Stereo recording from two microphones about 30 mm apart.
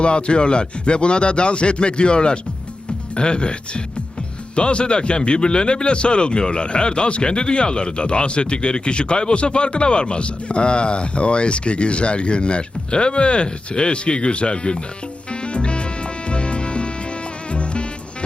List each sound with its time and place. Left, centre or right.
0.0 s speech: left
15.3 s music: left